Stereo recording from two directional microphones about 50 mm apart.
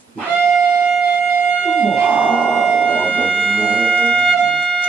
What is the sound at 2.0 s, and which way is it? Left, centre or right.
Music, right.